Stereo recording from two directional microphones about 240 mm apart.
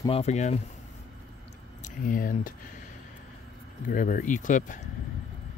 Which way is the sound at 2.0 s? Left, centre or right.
Left.